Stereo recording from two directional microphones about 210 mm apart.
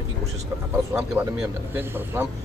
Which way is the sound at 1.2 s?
10° right (ahead or behind).